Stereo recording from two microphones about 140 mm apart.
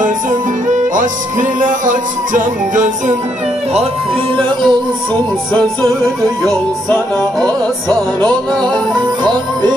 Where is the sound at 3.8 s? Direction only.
40° right (ahead or behind).